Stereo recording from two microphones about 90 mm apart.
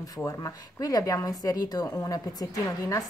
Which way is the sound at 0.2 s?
40° left (ahead or behind).